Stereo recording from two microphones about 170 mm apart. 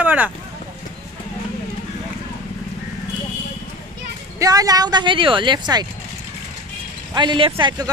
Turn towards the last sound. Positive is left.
turn(degrees=-25)  # may be behind; listen again after turning